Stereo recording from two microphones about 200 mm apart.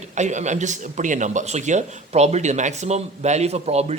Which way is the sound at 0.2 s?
35° right (ahead or behind).